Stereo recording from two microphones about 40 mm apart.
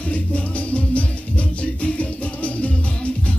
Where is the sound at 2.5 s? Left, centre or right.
Left.